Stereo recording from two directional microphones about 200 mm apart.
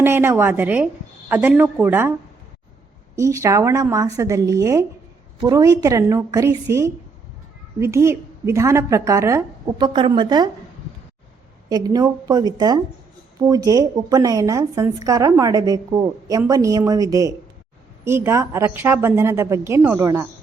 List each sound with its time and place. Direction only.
0.0 s a woman's voice: 10° right (ahead or behind)
3.2 s a woman's voice: 15° right (ahead or behind)
11.7 s a woman's voice: 20° right (ahead or behind)